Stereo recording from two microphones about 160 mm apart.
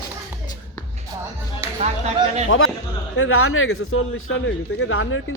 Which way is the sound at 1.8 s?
45° right (ahead or behind).